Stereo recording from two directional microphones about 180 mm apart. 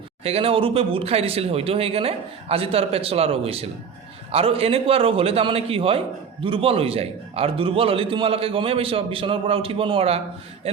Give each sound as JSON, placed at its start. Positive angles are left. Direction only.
{"t": 0.2, "sound": "a man's voice", "side_deg": -35}